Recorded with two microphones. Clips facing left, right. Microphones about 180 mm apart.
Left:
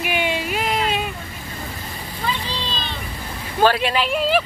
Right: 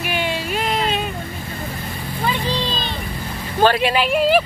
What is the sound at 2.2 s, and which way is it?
Vehicle, 45° right (ahead or behind).